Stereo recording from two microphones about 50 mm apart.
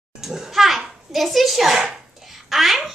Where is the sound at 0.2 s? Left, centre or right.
Centre.